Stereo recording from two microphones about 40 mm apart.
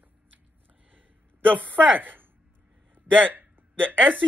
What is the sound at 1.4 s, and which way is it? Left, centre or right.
Speech, right.